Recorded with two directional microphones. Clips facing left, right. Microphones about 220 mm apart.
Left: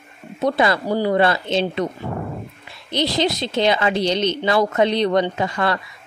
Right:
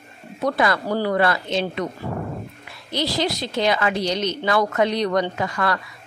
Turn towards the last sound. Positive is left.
turn(degrees=25)  # may be behind; listen again after turning